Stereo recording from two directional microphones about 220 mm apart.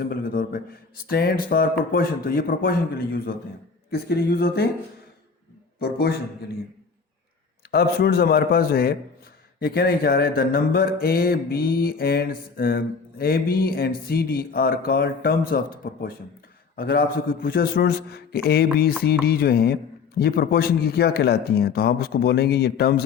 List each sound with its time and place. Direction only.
0.1 s mantra: 40° left (ahead or behind)
5.8 s mantra: 45° left (ahead or behind)
7.7 s mantra: 45° left (ahead or behind)